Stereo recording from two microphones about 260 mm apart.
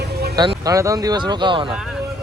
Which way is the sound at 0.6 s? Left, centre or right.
Centre.